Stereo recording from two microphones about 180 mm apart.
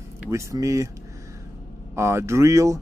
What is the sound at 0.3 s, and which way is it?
Speech, 15° right (ahead or behind).